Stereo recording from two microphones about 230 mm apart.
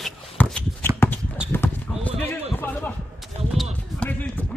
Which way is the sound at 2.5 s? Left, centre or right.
Centre.